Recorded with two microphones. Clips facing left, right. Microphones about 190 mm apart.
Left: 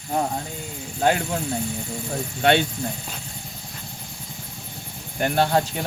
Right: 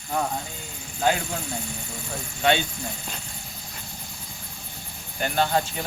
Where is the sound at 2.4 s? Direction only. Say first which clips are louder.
Left 3 dB; 60° left (ahead or behind).